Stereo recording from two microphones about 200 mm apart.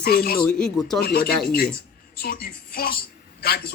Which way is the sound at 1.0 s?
50° left (ahead or behind).